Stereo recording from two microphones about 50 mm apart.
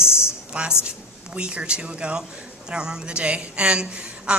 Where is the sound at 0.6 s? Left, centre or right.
Right.